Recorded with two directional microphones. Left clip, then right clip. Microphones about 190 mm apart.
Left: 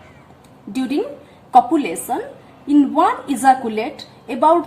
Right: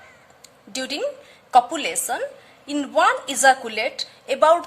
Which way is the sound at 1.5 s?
40° right (ahead or behind).